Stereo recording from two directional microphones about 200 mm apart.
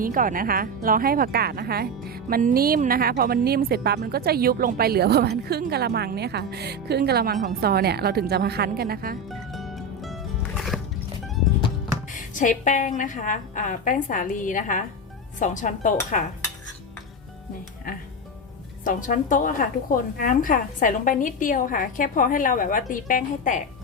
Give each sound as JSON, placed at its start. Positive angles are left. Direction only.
{"t": 0.0, "sound": "a woman's voice", "side_deg": -45}
{"t": 9.3, "sound": "music", "side_deg": 0}
{"t": 12.1, "sound": "a woman's voice", "side_deg": 40}
{"t": 18.9, "sound": "a woman's voice", "side_deg": 40}